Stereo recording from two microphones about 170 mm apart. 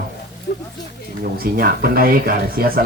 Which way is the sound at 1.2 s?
60° right (ahead or behind).